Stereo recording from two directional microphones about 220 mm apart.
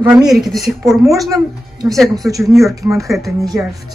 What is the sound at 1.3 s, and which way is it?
A woman's voice, 15° right (ahead or behind).